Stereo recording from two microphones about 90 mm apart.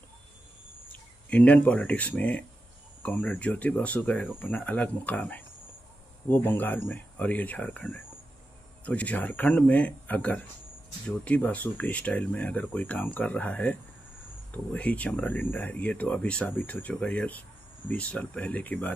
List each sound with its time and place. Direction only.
1.3 s speech: 15° left (ahead or behind)
8.8 s speech: 15° left (ahead or behind)